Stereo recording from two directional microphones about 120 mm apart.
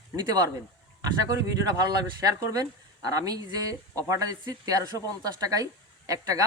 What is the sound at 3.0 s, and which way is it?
Speech, 30° right (ahead or behind).